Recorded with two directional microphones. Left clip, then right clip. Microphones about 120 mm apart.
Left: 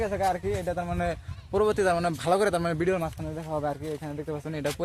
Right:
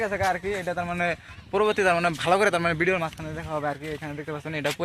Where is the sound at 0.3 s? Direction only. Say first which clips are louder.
Right 2 dB; 5° right (ahead or behind).